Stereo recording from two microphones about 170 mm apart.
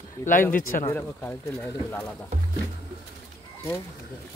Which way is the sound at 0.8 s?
10° left (ahead or behind).